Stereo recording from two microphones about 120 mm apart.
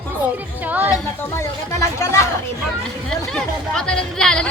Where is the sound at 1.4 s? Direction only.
25° left (ahead or behind).